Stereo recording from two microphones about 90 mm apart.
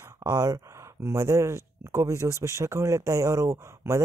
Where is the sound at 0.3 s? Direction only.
40° right (ahead or behind).